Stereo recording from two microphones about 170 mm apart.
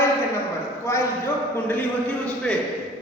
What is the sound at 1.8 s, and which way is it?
Speech, 5° left (ahead or behind).